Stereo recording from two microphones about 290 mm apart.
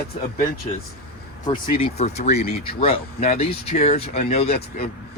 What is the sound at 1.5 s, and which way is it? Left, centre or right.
Speech, centre.